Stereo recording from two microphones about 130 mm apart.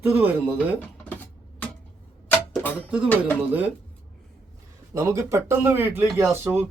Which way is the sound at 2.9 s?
10° right (ahead or behind).